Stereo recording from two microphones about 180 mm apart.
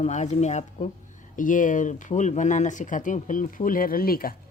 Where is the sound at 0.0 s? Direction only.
40° left (ahead or behind).